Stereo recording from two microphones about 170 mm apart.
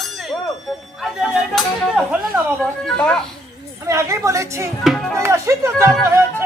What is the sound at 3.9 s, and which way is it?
Speech, 15° right (ahead or behind).